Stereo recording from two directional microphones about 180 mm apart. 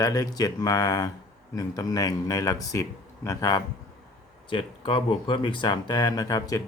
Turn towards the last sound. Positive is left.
turn(degrees=20)  # may be behind; listen again after turning